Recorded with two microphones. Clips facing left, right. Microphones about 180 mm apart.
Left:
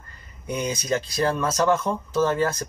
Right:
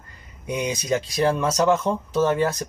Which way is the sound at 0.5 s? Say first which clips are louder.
Right 1 dB; 15° right (ahead or behind).